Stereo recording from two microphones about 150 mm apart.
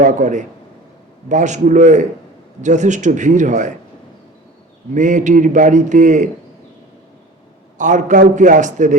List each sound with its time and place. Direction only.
0.0 s a man's voice: 55° right (ahead or behind)
4.9 s a man's voice: 55° right (ahead or behind)
7.8 s a man's voice: 55° right (ahead or behind)